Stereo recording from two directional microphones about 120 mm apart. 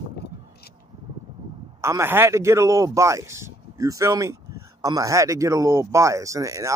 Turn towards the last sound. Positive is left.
turn(degrees=-25)  # may be behind; listen again after turning